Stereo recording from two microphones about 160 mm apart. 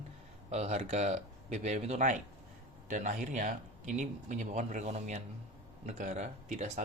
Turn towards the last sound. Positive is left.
turn(degrees=-45)  # may be behind; listen again after turning